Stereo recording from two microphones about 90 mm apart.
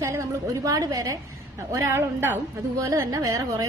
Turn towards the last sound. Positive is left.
turn(degrees=-40)  # may be behind; listen again after turning